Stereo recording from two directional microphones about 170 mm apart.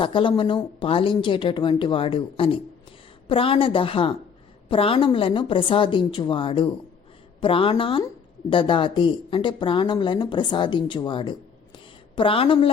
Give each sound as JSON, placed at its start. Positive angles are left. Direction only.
{"t": 0.0, "sound": "a woman's voice", "side_deg": 30}